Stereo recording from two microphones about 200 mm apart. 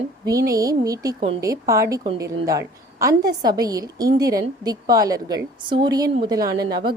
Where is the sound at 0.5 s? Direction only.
20° right (ahead or behind).